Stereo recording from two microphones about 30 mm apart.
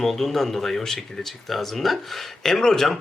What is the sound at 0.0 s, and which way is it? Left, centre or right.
Speech, centre.